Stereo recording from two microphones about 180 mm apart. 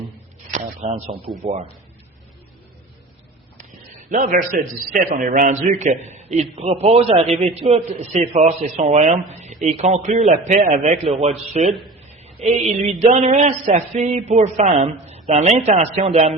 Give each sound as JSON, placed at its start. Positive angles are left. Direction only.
{"t": 0.5, "sound": "speech", "side_deg": -40}
{"t": 3.7, "sound": "speech", "side_deg": -45}
{"t": 11.6, "sound": "speech", "side_deg": 0}
{"t": 12.2, "sound": "speech", "side_deg": -35}